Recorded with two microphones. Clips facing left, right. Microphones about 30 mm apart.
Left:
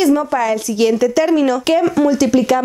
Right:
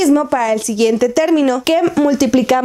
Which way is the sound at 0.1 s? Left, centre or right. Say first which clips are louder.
Right 2 dB; centre.